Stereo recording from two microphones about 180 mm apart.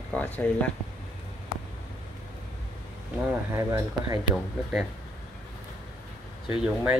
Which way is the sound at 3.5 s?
15° right (ahead or behind).